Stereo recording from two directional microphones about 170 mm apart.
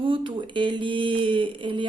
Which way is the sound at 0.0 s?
30° right (ahead or behind).